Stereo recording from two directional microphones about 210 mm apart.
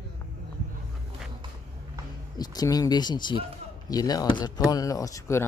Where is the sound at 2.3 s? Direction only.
20° left (ahead or behind).